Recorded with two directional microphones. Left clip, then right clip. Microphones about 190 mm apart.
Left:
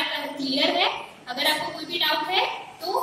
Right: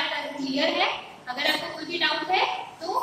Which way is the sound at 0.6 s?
5° left (ahead or behind).